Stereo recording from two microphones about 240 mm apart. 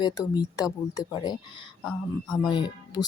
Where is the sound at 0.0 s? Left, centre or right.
Centre.